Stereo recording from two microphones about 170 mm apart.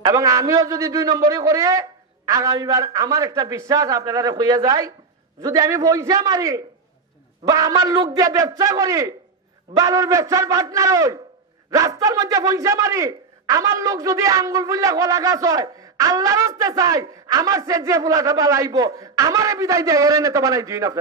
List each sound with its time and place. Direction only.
0.0 s speech: 20° right (ahead or behind)